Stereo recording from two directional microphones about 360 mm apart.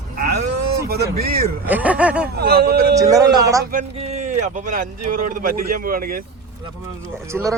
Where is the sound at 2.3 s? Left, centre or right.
Right.